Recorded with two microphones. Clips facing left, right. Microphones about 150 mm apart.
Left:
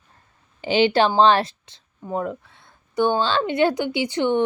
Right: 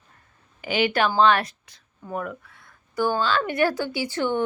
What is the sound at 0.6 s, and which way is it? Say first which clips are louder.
A woman's voice: left 5 dB; 30° left (ahead or behind).